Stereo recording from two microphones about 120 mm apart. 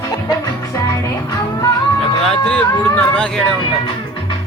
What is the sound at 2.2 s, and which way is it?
Speech, 5° left (ahead or behind).